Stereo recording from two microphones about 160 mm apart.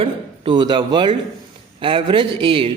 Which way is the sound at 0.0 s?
30° right (ahead or behind).